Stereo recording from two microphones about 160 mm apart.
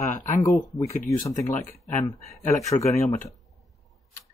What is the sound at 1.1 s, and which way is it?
Speech, 20° left (ahead or behind).